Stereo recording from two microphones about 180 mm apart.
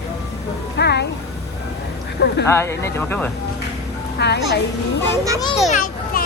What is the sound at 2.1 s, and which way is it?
Speech, 70° left (ahead or behind).